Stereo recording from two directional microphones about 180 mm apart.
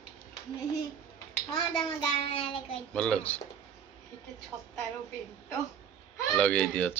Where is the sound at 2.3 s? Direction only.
30° left (ahead or behind).